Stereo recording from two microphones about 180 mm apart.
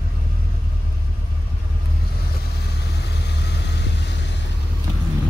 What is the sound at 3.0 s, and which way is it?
Vehicle, 70° left (ahead or behind).